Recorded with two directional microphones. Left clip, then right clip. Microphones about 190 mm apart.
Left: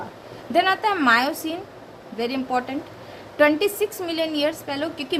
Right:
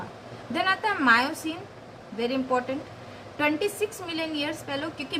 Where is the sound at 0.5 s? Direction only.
40° left (ahead or behind).